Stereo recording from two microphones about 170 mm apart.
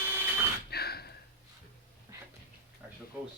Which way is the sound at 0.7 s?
65° left (ahead or behind).